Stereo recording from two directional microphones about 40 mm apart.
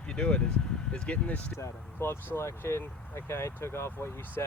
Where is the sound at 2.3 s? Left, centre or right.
Left.